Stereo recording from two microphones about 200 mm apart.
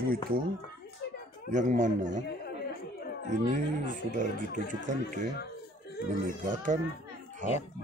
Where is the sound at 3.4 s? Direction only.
40° right (ahead or behind).